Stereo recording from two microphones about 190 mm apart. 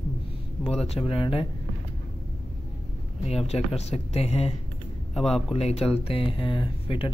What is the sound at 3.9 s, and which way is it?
Speech, 35° left (ahead or behind).